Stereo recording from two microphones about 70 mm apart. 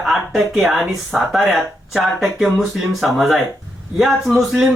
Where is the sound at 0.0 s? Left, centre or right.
Centre.